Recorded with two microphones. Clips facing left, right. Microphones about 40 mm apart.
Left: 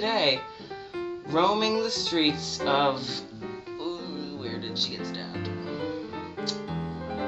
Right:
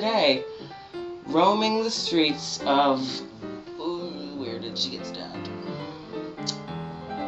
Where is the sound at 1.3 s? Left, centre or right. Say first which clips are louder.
Right 3 dB; centre.